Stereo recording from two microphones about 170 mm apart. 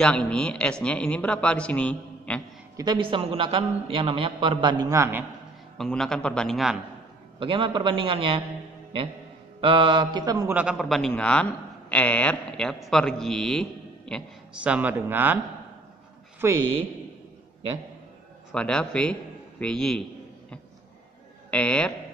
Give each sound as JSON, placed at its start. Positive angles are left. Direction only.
{"t": 0.0, "sound": "speech", "side_deg": 5}
{"t": 2.8, "sound": "a man's voice", "side_deg": -25}
{"t": 5.8, "sound": "a man's voice", "side_deg": 5}
{"t": 7.3, "sound": "a man's voice", "side_deg": -30}
{"t": 9.6, "sound": "mantra", "side_deg": -30}
{"t": 10.5, "sound": "a man's voice", "side_deg": -5}
{"t": 14.5, "sound": "speech", "side_deg": -5}
{"t": 16.4, "sound": "speech", "side_deg": -15}
{"t": 18.5, "sound": "a man's voice", "side_deg": 5}
{"t": 21.5, "sound": "speech", "side_deg": 5}